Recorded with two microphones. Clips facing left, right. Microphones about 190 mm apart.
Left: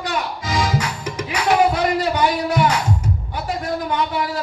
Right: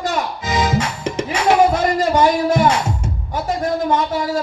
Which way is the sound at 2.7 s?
25° right (ahead or behind).